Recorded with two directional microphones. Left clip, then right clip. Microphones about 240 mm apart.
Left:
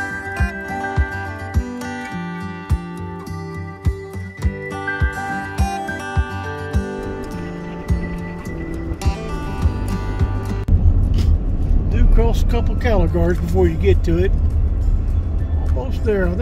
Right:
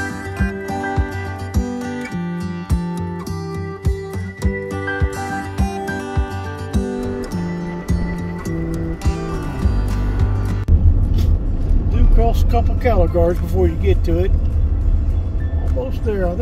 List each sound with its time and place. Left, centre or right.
0.0 s music: centre
4.4 s music: centre
11.9 s speech: left
16.1 s speech: left